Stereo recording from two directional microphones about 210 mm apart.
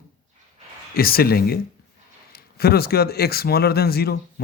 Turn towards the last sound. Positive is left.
turn(degrees=50)  # may be behind; listen again after turning